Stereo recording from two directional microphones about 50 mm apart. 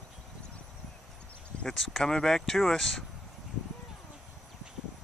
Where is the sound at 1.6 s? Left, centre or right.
Centre.